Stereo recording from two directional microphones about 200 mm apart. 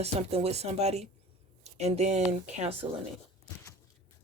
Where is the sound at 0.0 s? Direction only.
30° right (ahead or behind).